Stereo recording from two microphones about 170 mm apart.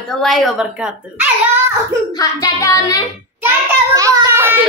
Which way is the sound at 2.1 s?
20° left (ahead or behind).